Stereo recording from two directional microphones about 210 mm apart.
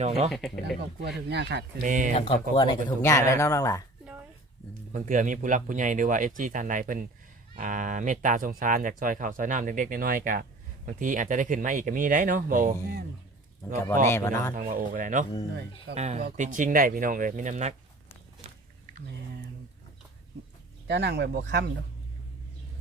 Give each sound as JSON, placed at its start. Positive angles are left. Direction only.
{"t": 0.0, "sound": "speech", "side_deg": -30}
{"t": 0.3, "sound": "speech", "side_deg": 0}
{"t": 1.3, "sound": "speech", "side_deg": -55}
{"t": 1.8, "sound": "speech", "side_deg": -40}
{"t": 2.1, "sound": "speech", "side_deg": 30}
{"t": 4.9, "sound": "speech", "side_deg": -40}
{"t": 13.6, "sound": "speech", "side_deg": 15}
{"t": 14.5, "sound": "speech", "side_deg": -40}
{"t": 20.8, "sound": "speech", "side_deg": -55}